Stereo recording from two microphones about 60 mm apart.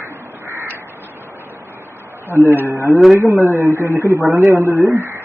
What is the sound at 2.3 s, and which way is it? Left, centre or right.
A man's voice, right.